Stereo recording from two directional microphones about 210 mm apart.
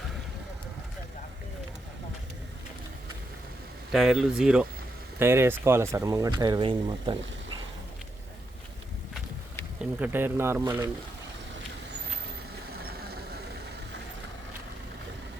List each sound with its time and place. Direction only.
3.9 s speech: 5° right (ahead or behind); by 7.2 s 20° right (ahead or behind)
10.0 s speech: 10° right (ahead or behind)